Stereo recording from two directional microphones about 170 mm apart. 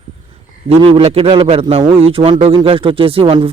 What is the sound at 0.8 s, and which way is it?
A man's voice, 35° right (ahead or behind).